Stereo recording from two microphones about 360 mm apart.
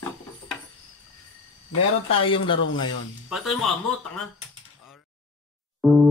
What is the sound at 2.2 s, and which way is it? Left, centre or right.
Speech, centre.